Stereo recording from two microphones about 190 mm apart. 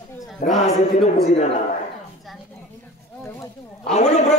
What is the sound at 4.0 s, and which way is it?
Speech, 35° left (ahead or behind).